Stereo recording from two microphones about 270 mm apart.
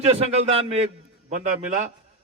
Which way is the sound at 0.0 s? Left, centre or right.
Right.